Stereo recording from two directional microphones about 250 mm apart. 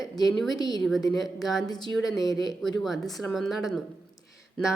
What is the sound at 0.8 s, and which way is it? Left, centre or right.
Speech, centre.